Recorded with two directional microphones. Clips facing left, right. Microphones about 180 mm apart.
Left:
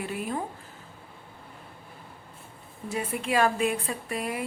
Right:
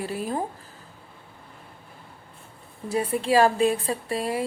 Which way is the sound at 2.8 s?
35° right (ahead or behind).